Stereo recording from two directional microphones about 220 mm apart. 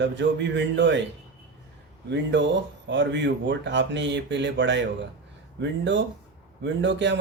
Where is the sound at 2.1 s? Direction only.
55° right (ahead or behind).